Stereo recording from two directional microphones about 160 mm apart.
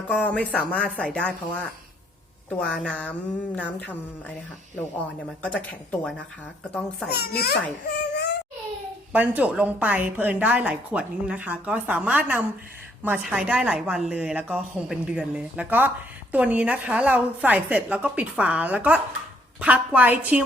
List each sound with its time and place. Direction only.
0.1 s speech: 10° left (ahead or behind)
5.4 s speech: 5° left (ahead or behind)
7.1 s a child's voice: 80° left
7.9 s whimper: 90° left
9.1 s a woman's voice: 10° right (ahead or behind)